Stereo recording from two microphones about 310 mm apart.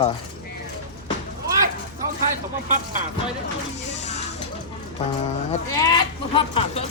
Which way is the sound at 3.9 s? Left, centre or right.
Left.